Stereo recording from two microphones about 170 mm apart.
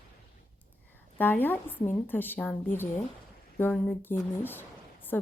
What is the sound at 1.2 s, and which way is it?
A woman's voice, 10° left (ahead or behind).